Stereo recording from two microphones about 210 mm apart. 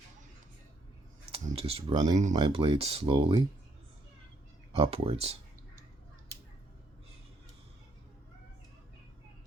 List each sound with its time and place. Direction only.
1.3 s speech: 25° right (ahead or behind)
4.7 s speech: 25° right (ahead or behind)